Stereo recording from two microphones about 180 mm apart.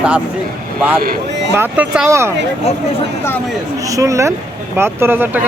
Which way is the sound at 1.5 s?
10° right (ahead or behind).